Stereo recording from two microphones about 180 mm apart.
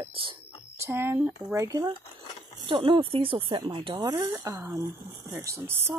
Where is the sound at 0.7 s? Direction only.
15° right (ahead or behind).